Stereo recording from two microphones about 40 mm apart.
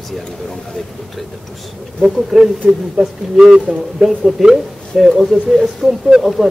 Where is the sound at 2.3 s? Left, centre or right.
Centre.